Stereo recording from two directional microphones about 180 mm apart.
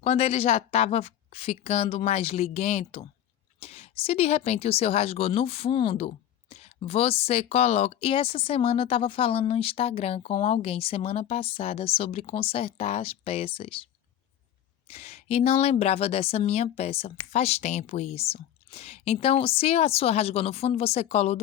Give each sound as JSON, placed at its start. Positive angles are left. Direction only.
{"t": 0.0, "sound": "speech", "side_deg": 35}
{"t": 14.8, "sound": "speech", "side_deg": 35}